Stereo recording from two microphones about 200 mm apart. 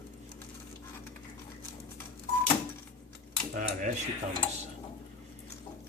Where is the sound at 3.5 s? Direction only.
40° right (ahead or behind).